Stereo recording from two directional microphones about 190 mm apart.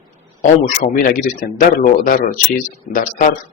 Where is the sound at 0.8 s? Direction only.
45° left (ahead or behind).